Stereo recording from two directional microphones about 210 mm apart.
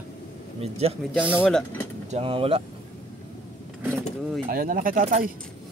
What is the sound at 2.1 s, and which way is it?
Speech, 25° right (ahead or behind).